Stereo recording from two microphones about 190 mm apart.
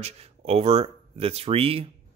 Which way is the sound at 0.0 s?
35° right (ahead or behind).